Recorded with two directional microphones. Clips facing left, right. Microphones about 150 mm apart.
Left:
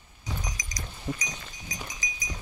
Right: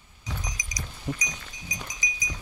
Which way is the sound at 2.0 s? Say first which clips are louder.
Right 2 dB; 15° right (ahead or behind).